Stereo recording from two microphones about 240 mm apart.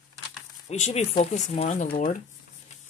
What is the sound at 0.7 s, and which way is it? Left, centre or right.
Speech, left.